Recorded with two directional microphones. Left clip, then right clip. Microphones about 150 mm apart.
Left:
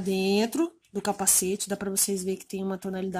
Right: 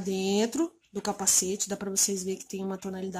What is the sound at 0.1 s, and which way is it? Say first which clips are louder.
A woman's voice: left 2 dB; 40° left (ahead or behind).